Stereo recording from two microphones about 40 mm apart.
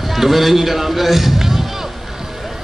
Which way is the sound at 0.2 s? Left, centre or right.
Centre.